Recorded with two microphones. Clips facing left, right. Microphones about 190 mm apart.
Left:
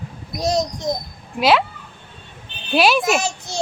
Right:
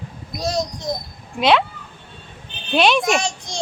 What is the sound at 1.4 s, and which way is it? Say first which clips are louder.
Speech: even; 5° left (ahead or behind).